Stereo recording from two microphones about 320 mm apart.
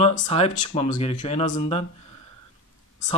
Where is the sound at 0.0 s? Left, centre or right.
Centre.